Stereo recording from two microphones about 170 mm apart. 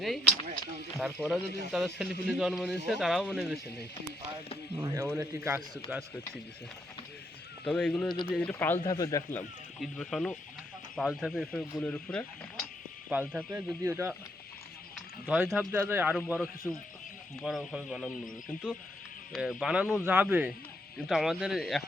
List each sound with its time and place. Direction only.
0.0 s a man's voice: centre (ahead or behind)
4.8 s speech: 15° right (ahead or behind)
7.6 s a man's voice: 5° left (ahead or behind)
8.8 s a man's voice: 20° left (ahead or behind)
9.8 s a man's voice: 5° left (ahead or behind)
13.1 s speech: 10° right (ahead or behind)
15.3 s speech: 5° right (ahead or behind)
16.7 s a man's voice: centre (ahead or behind)